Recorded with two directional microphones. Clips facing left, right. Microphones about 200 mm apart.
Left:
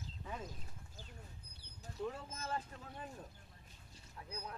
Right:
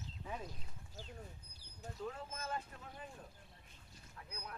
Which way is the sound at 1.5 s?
65° left (ahead or behind).